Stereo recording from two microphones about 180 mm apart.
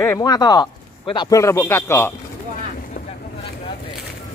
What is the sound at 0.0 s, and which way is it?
Speech, 20° left (ahead or behind).